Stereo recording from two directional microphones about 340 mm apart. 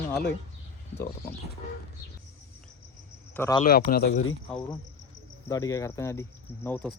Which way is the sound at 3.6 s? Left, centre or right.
Left.